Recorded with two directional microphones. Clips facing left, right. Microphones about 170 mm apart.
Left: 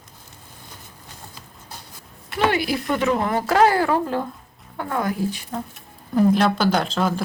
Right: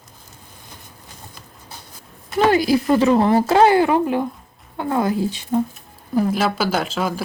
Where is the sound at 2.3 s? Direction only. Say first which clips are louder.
Right 6 dB; 40° right (ahead or behind).